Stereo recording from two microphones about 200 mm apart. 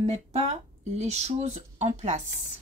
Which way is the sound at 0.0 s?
30° right (ahead or behind).